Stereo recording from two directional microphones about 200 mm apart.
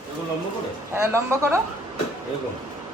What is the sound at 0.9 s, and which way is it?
Speech, 15° right (ahead or behind).